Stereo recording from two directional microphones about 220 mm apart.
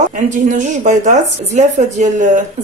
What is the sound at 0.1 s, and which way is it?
A woman's voice, 35° right (ahead or behind).